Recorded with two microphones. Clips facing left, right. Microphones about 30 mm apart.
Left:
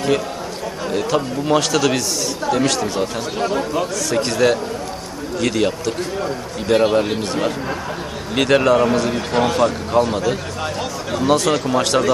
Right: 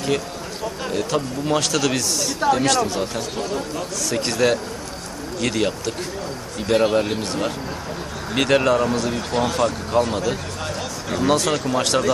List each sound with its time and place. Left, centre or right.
0.8 s a man's voice: centre
3.3 s speech: left
4.1 s a man's voice: centre
8.4 s speech: centre
8.7 s a man's voice: centre